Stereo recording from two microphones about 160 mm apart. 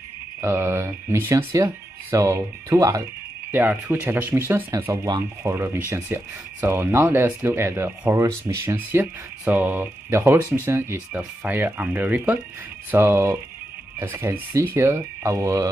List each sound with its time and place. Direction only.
0.4 s speech: 15° right (ahead or behind)